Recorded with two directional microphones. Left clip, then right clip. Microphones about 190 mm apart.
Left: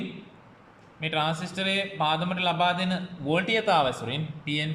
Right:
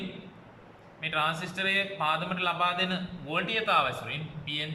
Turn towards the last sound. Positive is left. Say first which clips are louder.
# left 4 dB
turn(degrees=30)  # may be behind; listen again after turning